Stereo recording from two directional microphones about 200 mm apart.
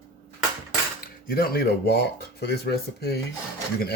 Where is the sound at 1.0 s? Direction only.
50° left (ahead or behind).